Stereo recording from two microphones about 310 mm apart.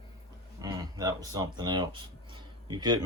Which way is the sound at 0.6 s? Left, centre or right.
Centre.